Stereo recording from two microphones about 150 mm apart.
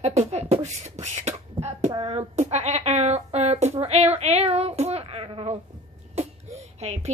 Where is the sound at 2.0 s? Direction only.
35° right (ahead or behind).